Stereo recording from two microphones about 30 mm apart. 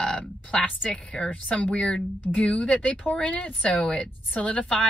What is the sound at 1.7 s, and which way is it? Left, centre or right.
Speech, left.